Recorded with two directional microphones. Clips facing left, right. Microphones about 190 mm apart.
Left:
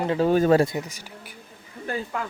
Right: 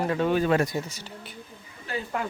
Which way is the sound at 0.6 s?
20° left (ahead or behind).